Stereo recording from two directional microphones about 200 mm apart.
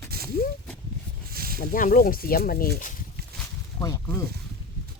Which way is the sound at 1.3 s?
50° right (ahead or behind).